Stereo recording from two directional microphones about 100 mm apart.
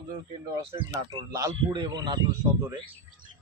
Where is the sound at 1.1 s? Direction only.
35° right (ahead or behind).